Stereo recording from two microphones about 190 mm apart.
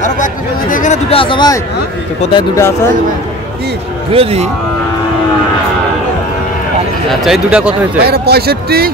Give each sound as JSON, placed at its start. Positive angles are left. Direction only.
{"t": 0.0, "sound": "speech", "side_deg": 45}
{"t": 4.1, "sound": "speech", "side_deg": -30}
{"t": 7.1, "sound": "speech", "side_deg": 0}
{"t": 8.0, "sound": "speech", "side_deg": -55}